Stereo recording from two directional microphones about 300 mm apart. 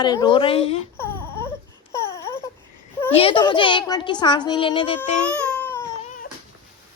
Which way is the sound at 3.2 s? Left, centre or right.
Centre.